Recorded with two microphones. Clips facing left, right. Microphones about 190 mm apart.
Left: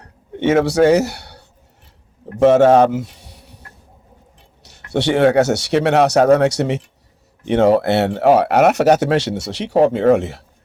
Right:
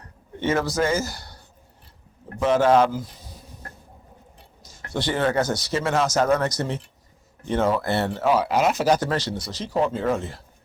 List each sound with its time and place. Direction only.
0.4 s speech: 75° left (ahead or behind)
2.9 s a sound: 75° left (ahead or behind)
4.9 s speech: 70° left (ahead or behind)